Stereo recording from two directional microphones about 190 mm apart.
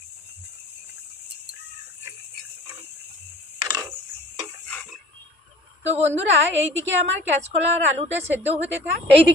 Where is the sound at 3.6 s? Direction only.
20° right (ahead or behind).